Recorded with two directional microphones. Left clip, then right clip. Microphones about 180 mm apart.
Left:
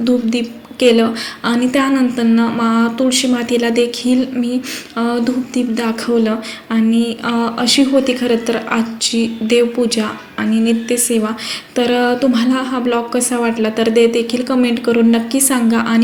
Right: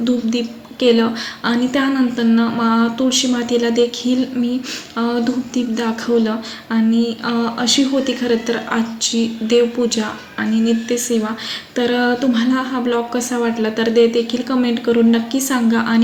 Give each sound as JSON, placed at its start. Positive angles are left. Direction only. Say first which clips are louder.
{"t": 0.0, "sound": "a woman's voice", "louder": "left 3 dB", "side_deg": 15}